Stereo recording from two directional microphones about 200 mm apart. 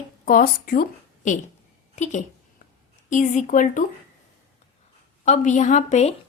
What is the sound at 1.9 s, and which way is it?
A woman's voice, 35° left (ahead or behind).